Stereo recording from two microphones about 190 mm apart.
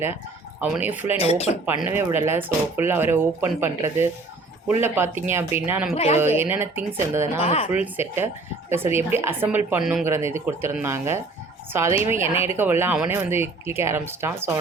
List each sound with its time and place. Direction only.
0.6 s a woman's voice: 10° right (ahead or behind)
1.2 s speech: 35° left (ahead or behind)
1.6 s a woman's voice: 10° right (ahead or behind)
5.9 s speech: 35° left (ahead or behind)
6.5 s a woman's voice: 10° right (ahead or behind)
7.4 s speech: 30° left (ahead or behind)
7.7 s a woman's voice: 10° right (ahead or behind)